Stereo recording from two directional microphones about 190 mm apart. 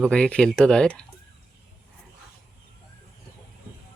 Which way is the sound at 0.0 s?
5° left (ahead or behind).